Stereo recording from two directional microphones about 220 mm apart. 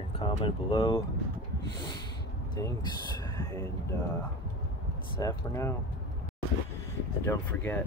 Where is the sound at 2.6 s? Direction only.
15° left (ahead or behind).